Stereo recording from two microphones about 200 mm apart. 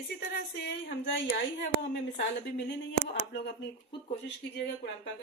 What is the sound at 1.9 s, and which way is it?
A woman's voice, 55° left (ahead or behind).